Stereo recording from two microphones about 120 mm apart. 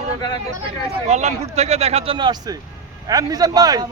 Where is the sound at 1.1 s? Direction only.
70° right (ahead or behind); by 3.9 s 35° right (ahead or behind).